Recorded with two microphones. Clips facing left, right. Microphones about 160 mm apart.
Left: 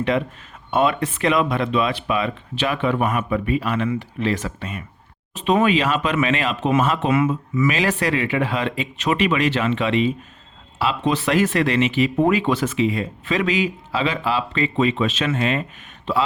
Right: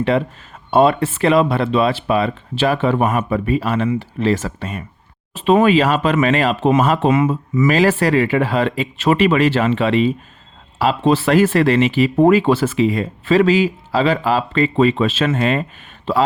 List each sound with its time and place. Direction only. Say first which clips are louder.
0.1 s speech: right 4 dB; 35° right (ahead or behind)